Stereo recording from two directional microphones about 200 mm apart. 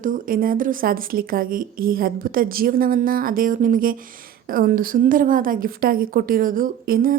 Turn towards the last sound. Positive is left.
turn(degrees=-45)  # may be behind; listen again after turning